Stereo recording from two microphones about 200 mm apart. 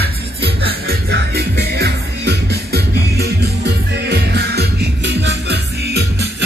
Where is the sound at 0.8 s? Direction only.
55° right (ahead or behind).